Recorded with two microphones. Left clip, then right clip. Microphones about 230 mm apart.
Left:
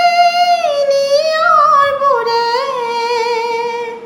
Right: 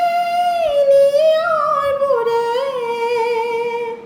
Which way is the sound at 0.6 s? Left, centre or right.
Centre.